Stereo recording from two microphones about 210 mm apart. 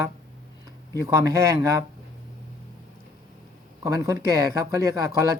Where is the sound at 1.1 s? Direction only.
15° right (ahead or behind).